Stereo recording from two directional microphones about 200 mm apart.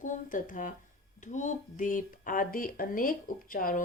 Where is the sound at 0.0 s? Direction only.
40° left (ahead or behind).